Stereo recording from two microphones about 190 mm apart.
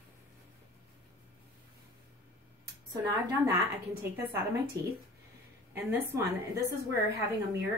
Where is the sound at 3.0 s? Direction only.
15° right (ahead or behind).